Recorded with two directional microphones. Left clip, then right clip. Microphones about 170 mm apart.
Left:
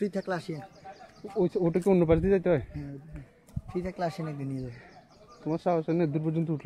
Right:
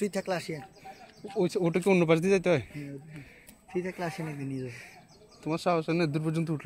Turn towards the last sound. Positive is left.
turn(degrees=20)  # may be behind; listen again after turning